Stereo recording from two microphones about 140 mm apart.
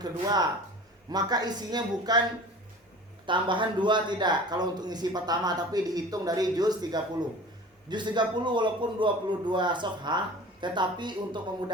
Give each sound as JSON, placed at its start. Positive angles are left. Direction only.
{"t": 0.0, "sound": "a man's voice", "side_deg": -30}
{"t": 3.2, "sound": "a man's voice", "side_deg": -35}